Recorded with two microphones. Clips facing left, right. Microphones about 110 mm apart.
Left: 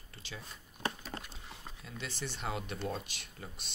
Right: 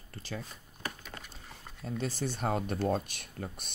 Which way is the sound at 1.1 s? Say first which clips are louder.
Left 3 dB; 35° left (ahead or behind).